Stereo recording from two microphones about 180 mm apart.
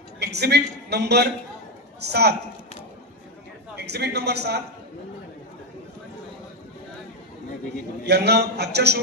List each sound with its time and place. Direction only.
0.2 s a man's voice: 65° right (ahead or behind)
3.7 s a man's voice: 65° right (ahead or behind)
8.0 s a man's voice: 65° right (ahead or behind)